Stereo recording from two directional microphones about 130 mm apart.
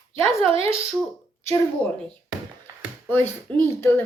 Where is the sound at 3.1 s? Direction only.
15° left (ahead or behind).